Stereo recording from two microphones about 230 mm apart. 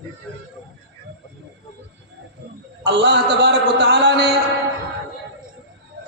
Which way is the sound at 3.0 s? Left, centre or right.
Right.